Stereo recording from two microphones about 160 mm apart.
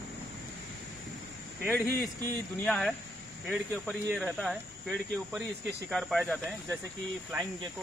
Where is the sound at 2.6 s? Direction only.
5° left (ahead or behind).